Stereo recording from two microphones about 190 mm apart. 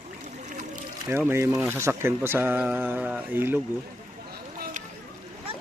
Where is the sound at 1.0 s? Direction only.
15° right (ahead or behind).